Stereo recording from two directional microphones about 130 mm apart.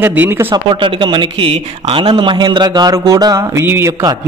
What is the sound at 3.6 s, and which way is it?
Speech, 15° right (ahead or behind).